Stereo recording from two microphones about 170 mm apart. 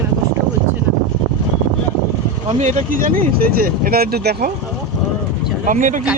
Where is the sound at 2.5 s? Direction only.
45° right (ahead or behind); by 4.5 s 70° right (ahead or behind).